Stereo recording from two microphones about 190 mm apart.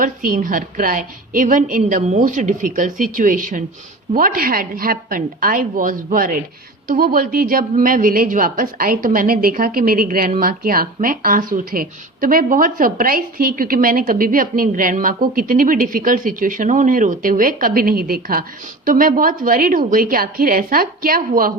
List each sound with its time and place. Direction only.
0.0 s speech: 45° right (ahead or behind)